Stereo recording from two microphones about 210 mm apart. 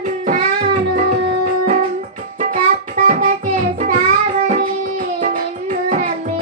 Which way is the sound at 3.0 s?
40° right (ahead or behind).